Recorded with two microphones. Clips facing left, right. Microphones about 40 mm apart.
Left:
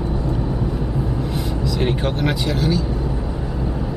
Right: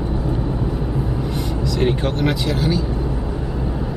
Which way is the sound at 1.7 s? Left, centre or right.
Centre.